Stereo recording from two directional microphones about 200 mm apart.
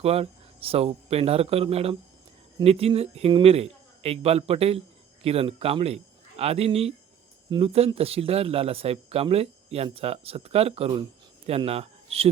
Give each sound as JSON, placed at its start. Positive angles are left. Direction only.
{"t": 0.0, "sound": "speech", "side_deg": -30}